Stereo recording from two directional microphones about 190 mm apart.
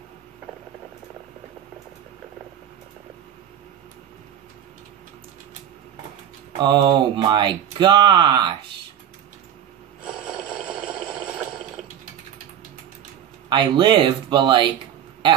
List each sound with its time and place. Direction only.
6.6 s speech: 25° right (ahead or behind)
10.0 s a sound: 5° right (ahead or behind)
13.5 s speech: 25° right (ahead or behind)